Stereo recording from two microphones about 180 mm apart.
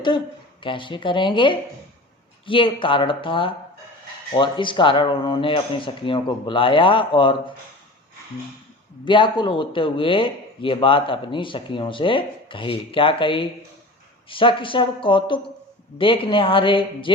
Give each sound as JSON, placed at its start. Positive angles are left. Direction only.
{"t": 0.6, "sound": "speech", "side_deg": 30}
{"t": 9.0, "sound": "speech", "side_deg": 25}